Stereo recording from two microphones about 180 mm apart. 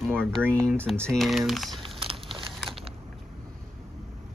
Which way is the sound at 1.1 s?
Centre (ahead or behind).